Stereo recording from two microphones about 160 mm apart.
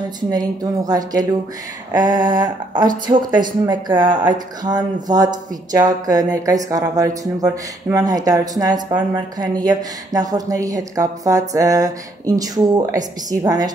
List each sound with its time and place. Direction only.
0.3 s speech: 25° right (ahead or behind)